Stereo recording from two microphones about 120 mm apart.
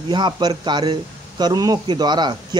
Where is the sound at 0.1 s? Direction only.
35° right (ahead or behind).